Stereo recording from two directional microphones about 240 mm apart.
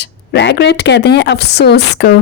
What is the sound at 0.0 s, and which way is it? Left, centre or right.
A woman's voice, left.